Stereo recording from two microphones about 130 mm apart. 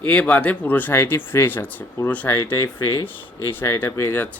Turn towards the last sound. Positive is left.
turn(degrees=20)  # may be behind; listen again after turning